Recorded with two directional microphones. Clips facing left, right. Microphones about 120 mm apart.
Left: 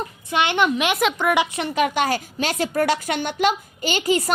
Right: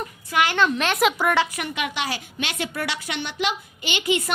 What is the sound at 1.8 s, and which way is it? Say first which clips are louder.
A woman's voice: left 9 dB; 45° left (ahead or behind).